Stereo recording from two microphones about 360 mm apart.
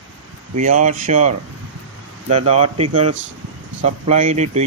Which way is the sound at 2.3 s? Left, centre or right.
Centre.